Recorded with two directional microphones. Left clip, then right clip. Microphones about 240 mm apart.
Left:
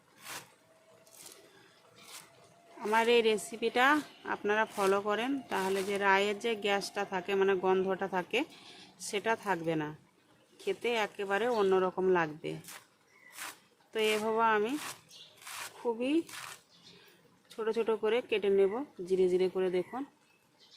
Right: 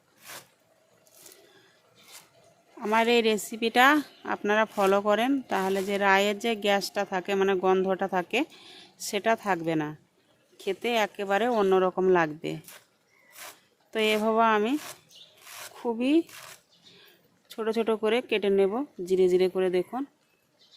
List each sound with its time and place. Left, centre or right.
2.8 s a woman's voice: right
13.9 s a woman's voice: right
15.8 s a woman's voice: right
17.5 s a woman's voice: right